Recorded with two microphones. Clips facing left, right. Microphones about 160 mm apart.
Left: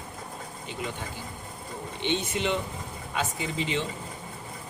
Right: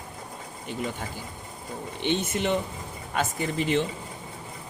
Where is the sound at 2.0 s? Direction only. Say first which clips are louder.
Right 2 dB; 50° right (ahead or behind).